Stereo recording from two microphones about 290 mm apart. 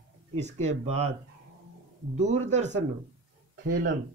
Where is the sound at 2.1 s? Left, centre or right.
Right.